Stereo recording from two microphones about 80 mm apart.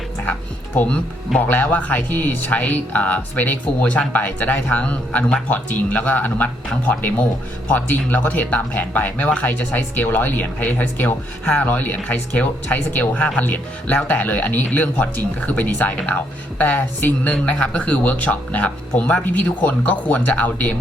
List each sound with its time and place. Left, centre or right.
0.9 s speech: centre